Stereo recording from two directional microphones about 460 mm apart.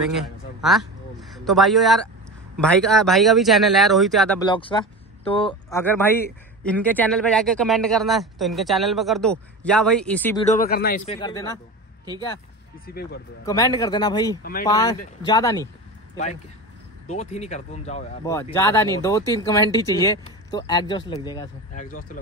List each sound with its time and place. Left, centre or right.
0.0 s a man's voice: centre
10.4 s speech: centre
12.8 s speech: centre
13.5 s speech: centre
17.1 s speech: centre